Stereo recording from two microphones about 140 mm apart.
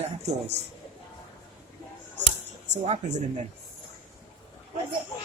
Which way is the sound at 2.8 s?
50° right (ahead or behind).